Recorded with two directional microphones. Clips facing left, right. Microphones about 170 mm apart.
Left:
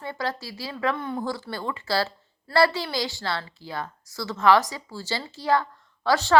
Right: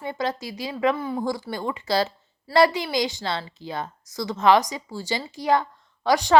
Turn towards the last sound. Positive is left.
turn(degrees=-15)  # may be behind; listen again after turning